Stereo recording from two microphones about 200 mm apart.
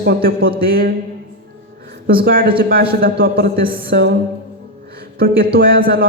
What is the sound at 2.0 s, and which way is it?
Speech, 50° right (ahead or behind).